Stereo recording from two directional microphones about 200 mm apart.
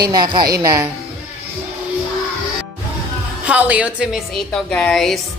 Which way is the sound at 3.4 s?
5° right (ahead or behind).